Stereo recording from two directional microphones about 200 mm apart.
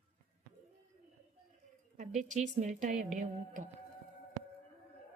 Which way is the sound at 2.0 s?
35° right (ahead or behind).